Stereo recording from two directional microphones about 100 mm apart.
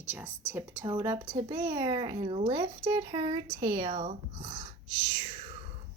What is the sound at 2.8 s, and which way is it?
Speech, 40° right (ahead or behind).